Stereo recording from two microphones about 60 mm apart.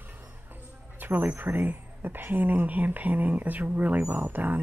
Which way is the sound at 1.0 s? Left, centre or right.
Right.